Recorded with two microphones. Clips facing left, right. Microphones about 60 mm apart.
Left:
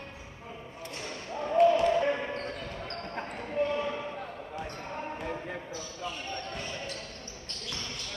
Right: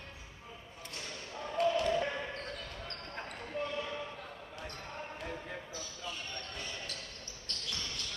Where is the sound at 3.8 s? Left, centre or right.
Left.